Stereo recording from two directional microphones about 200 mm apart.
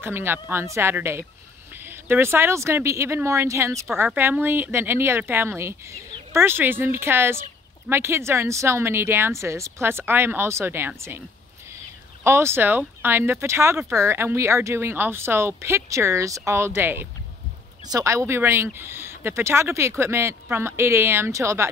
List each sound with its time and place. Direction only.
0.0 s speech: 10° right (ahead or behind)
12.2 s speech: 15° right (ahead or behind)